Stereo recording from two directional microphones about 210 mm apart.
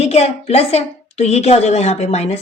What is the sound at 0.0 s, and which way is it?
A woman's voice, 30° left (ahead or behind).